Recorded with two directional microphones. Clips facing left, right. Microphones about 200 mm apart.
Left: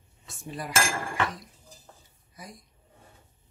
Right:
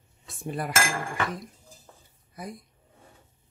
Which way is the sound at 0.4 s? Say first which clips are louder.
Right 5 dB; 55° right (ahead or behind).